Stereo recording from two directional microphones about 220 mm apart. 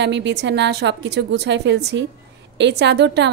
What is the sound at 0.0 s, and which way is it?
Speech, 50° right (ahead or behind).